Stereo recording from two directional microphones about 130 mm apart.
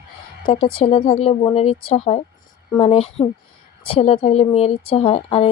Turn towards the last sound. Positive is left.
turn(degrees=45)  # may be behind; listen again after turning